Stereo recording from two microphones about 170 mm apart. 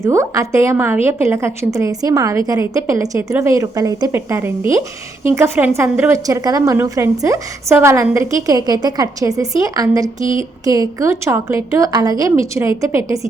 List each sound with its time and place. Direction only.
0.0 s a woman's voice: 15° right (ahead or behind)